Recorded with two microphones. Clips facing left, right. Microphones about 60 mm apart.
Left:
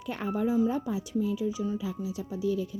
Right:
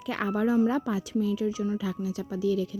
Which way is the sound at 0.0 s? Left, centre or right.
Right.